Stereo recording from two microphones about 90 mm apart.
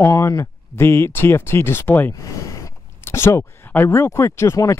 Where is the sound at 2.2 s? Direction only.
35° left (ahead or behind).